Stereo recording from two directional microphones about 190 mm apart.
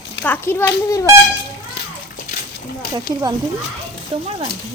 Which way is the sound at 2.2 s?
45° left (ahead or behind).